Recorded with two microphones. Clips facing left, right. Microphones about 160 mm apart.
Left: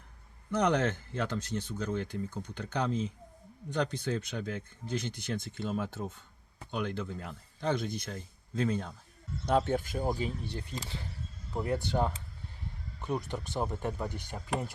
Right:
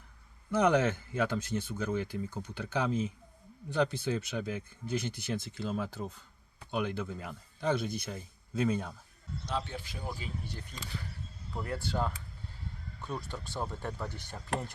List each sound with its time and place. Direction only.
0.5 s speech: 10° right (ahead or behind)
9.5 s speech: 50° left (ahead or behind); by 14.7 s 10° left (ahead or behind)